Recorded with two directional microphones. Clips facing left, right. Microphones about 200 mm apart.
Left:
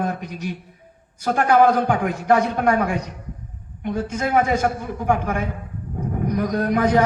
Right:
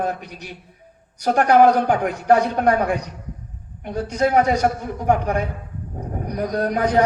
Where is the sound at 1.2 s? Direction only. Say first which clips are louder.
Right 2 dB; 40° right (ahead or behind).